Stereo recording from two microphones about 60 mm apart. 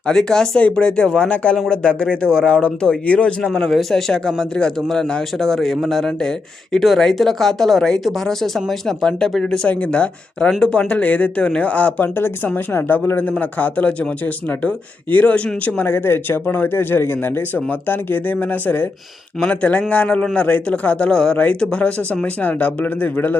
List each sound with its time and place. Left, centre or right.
0.1 s speech: centre
3.8 s speech: centre
9.6 s speech: left
13.4 s speech: left
15.1 s speech: left
21.1 s speech: centre; by 23.4 s left